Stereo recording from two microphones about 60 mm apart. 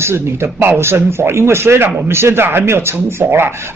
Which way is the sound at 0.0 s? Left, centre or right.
Right.